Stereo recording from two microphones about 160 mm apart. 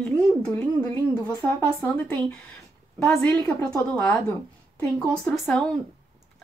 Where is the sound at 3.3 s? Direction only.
15° left (ahead or behind).